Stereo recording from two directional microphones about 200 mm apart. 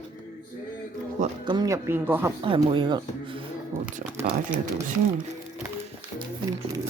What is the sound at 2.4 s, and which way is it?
Speech, 25° right (ahead or behind).